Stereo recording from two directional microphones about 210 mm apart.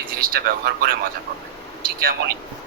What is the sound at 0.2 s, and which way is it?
Speech, 45° right (ahead or behind).